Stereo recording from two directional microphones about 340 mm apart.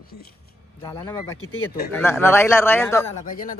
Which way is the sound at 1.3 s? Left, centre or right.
Left.